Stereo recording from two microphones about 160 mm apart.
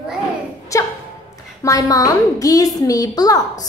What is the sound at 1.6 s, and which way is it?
A woman's voice, 20° left (ahead or behind).